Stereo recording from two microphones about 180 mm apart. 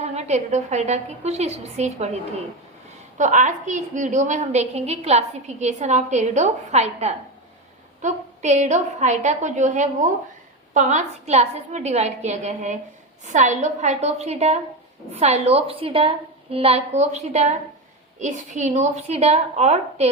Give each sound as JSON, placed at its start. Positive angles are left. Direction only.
{"t": 0.0, "sound": "a woman's voice", "side_deg": -40}
{"t": 3.2, "sound": "a woman's voice", "side_deg": -45}